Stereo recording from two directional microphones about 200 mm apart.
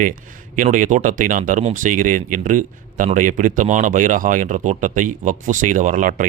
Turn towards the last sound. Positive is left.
turn(degrees=-40)  # may be behind; listen again after turning